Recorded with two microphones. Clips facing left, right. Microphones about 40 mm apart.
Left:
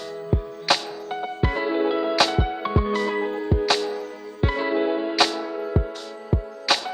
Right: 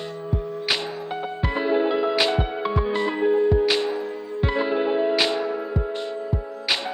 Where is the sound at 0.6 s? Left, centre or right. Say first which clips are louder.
Left 3 dB; centre.